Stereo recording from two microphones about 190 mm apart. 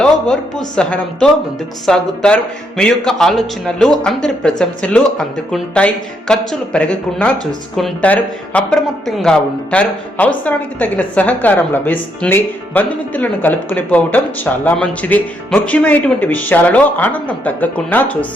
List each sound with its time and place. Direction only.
0.0 s a woman's voice: centre (ahead or behind)